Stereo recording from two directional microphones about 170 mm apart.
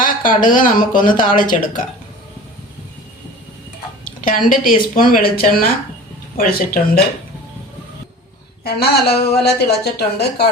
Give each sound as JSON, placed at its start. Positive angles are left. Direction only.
{"t": 0.0, "sound": "speech", "side_deg": 55}
{"t": 4.0, "sound": "a woman's voice", "side_deg": 50}
{"t": 8.6, "sound": "speech", "side_deg": 70}